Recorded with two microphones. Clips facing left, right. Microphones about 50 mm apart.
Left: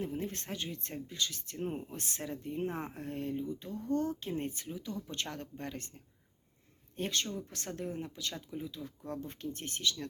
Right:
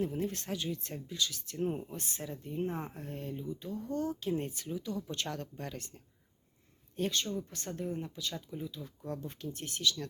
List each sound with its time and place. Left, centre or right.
0.0 s speech: left
1.5 s speech: left
2.0 s speech: left
4.3 s speech: left
7.5 s speech: left
9.0 s speech: left